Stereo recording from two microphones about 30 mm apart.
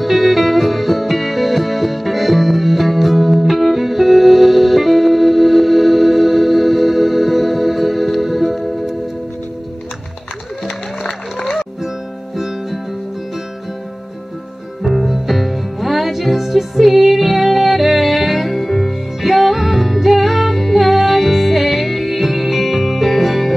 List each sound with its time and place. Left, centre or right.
0.0 s music: centre
12.4 s music: centre
14.9 s music: centre